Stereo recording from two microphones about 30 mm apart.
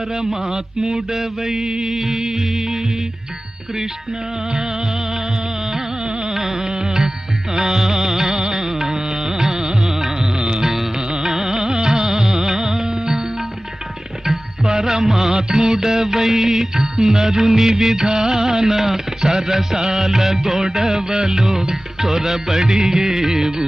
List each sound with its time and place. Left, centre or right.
0.1 s mantra: centre
1.9 s music: centre
4.5 s music: centre
6.1 s music: right
6.3 s music: centre
6.6 s music: right
7.5 s mantra: centre
7.8 s music: centre; by 10.6 s right
10.6 s music: centre